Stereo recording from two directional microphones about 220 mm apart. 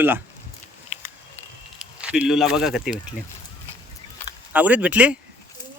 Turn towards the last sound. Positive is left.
turn(degrees=-5)  # may be behind; listen again after turning